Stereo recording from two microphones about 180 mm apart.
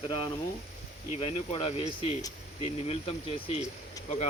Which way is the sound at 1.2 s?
30° left (ahead or behind).